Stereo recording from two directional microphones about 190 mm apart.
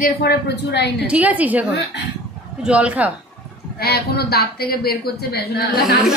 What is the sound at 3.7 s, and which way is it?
Speech, 55° left (ahead or behind).